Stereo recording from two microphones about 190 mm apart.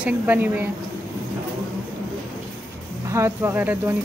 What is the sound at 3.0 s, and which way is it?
Speech, 15° right (ahead or behind).